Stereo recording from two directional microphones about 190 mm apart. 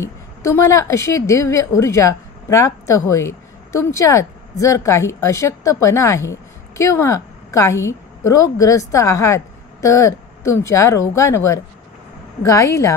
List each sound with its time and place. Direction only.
0.0 s a woman's voice: 15° left (ahead or behind)